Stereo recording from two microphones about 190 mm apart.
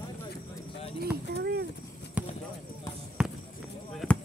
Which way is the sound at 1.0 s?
60° right (ahead or behind).